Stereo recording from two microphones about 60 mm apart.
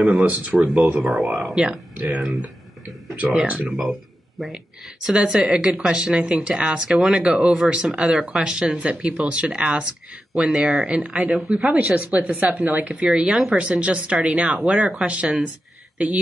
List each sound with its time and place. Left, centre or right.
0.2 s speech: right
0.6 s speech: centre
1.1 s speech: centre
1.5 s speech: centre
2.0 s speech: right
3.4 s speech: right
4.4 s speech: centre
5.1 s speech: centre